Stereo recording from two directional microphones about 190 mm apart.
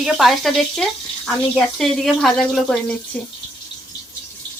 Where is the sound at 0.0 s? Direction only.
Centre (ahead or behind).